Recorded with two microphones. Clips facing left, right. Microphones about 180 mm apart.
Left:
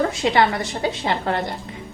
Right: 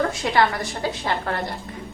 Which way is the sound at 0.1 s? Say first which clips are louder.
Left 2 dB; 25° left (ahead or behind).